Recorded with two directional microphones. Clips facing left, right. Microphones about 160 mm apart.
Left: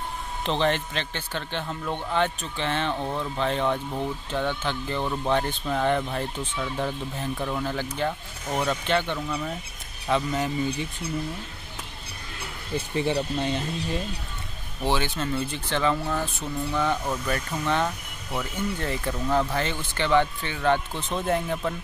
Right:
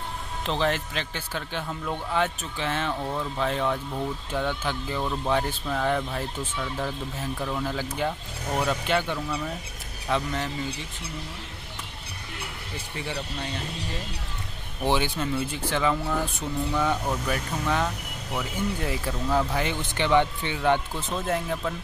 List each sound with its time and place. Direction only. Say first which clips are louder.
0.5 s speech: left 2 dB; 5° right (ahead or behind)
7.3 s speech: even; 5° left (ahead or behind)
8.0 s speech: even; 10° right (ahead or behind)
10.0 s speech: left 3 dB; 5° left (ahead or behind)
12.7 s speech: left 9 dB; 20° left (ahead or behind)
14.8 s speech: right 1 dB; 15° right (ahead or behind)
21.3 s speech: left 2 dB; centre (ahead or behind)